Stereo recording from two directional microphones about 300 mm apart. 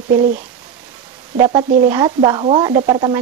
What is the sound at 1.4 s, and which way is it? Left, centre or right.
Speech, centre.